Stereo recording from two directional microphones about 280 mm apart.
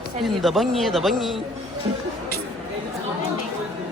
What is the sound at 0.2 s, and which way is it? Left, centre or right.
Speech, centre.